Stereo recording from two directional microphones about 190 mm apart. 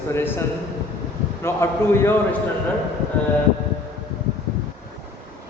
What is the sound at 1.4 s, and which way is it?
Speech, 15° left (ahead or behind).